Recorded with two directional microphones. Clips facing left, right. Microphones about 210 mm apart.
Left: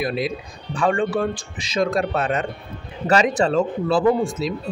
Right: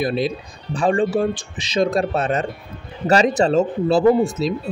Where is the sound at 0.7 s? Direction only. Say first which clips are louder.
Right 2 dB; 25° right (ahead or behind).